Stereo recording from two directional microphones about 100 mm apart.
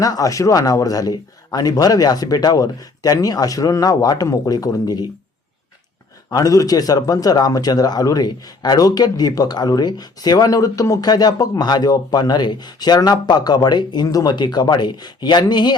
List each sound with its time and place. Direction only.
0.0 s a man's voice: 35° left (ahead or behind)
6.3 s a man's voice: 35° left (ahead or behind)